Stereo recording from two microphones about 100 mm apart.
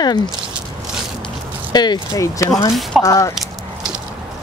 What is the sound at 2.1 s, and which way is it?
Speech, 30° left (ahead or behind).